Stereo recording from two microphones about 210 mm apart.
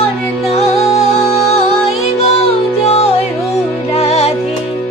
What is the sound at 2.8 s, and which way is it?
Music, 30° left (ahead or behind).